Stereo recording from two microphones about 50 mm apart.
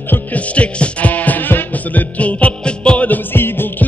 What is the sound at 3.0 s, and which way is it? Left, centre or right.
Music, left.